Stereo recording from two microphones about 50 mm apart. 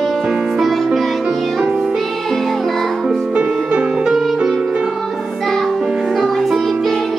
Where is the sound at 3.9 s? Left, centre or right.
Centre.